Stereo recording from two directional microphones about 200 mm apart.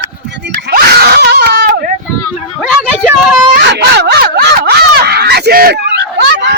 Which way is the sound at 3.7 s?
55° right (ahead or behind).